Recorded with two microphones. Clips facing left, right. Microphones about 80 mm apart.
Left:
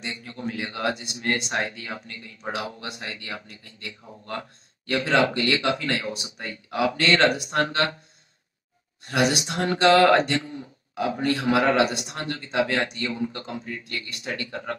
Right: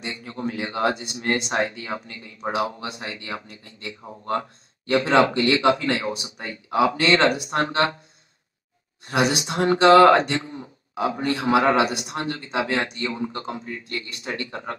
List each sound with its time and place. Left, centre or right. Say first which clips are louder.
0.0 s speech: right 3 dB; right
9.0 s speech: right 1 dB; right